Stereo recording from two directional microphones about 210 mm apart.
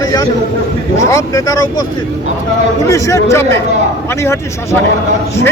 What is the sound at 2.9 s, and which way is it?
Speech, 15° left (ahead or behind).